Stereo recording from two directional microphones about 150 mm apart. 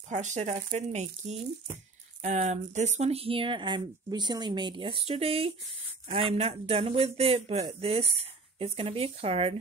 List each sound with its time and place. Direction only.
0.1 s speech: 50° right (ahead or behind)